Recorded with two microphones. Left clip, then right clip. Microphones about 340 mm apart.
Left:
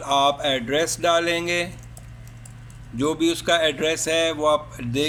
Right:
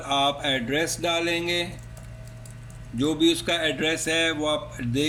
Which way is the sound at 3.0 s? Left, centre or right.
Centre.